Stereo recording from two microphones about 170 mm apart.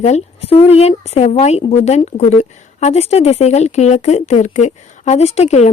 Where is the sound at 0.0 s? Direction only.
35° left (ahead or behind).